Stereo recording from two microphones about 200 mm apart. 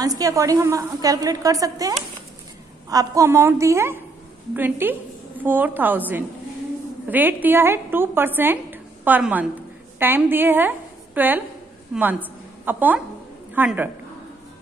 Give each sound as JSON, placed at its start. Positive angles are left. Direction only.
{"t": 0.0, "sound": "a woman's voice", "side_deg": -20}